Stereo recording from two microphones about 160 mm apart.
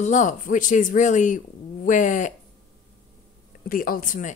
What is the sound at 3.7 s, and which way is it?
Speech, 60° left (ahead or behind).